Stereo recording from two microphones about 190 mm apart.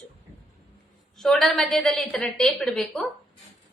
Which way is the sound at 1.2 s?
Centre (ahead or behind).